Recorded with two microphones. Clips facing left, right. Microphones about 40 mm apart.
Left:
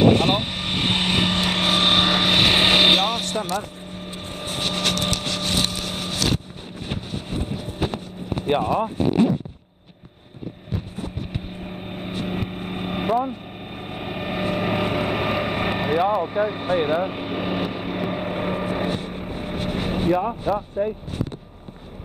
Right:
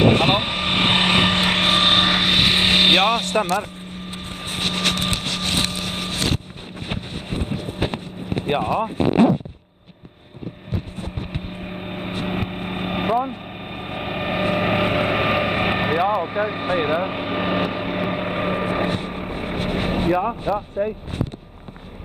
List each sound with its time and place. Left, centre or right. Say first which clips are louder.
0.0 s vehicle: right 1 dB; right; by 3.0 s centre
3.0 s speech: right 5 dB; centre
4.1 s vehicle: even; right
6.9 s boat: right 1 dB; right
8.5 s speech: left 1 dB; centre
8.9 s speech: right 5 dB; right
11.3 s vehicle: right 2 dB; right
20.5 s speech: right 1 dB; centre